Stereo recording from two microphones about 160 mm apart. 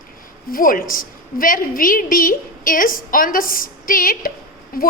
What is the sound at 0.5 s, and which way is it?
A woman's voice, 60° left (ahead or behind).